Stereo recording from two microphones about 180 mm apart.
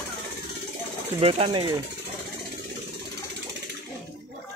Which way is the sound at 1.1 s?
30° right (ahead or behind).